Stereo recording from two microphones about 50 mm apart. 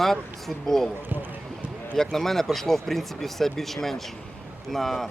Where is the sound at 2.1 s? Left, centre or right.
Centre.